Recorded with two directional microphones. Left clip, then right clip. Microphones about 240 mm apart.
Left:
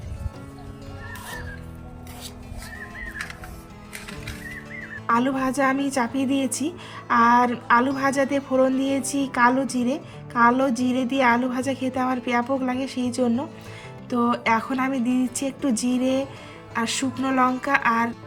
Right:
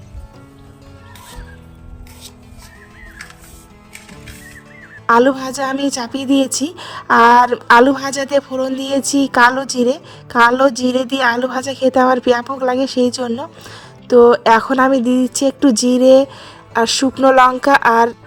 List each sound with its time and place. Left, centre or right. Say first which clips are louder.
5.5 s a woman's voice: right 3 dB; right
8.4 s speech: even; centre
8.8 s a woman's voice: right 8 dB; right